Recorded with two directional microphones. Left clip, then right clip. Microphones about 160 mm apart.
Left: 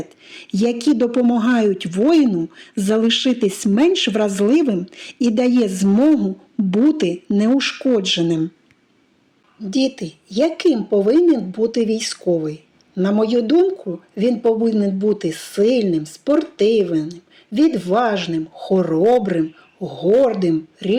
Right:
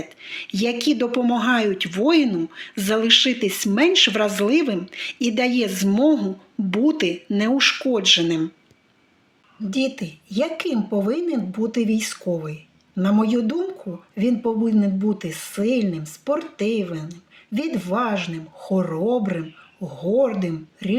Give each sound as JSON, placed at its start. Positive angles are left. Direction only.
{"t": 0.3, "sound": "speech", "side_deg": 45}
{"t": 9.6, "sound": "speech", "side_deg": 15}